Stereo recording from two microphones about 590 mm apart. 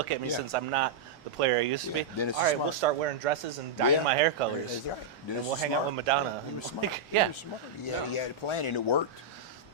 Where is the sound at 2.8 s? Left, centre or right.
Right.